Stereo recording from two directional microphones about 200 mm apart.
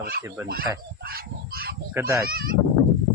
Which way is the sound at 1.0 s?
50° right (ahead or behind).